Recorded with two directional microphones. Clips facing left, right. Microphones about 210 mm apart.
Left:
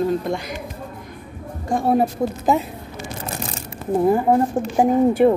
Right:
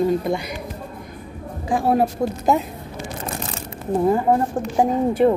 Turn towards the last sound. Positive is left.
turn(degrees=10)  # may be behind; listen again after turning